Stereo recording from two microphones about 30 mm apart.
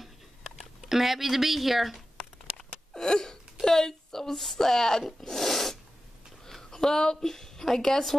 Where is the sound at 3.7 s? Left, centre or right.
Centre.